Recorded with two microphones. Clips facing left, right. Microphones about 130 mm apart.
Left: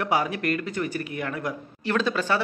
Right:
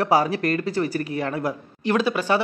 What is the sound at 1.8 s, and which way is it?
Speech, 15° right (ahead or behind).